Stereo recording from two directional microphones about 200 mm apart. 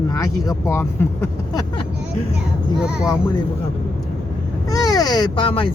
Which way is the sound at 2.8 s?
5° right (ahead or behind).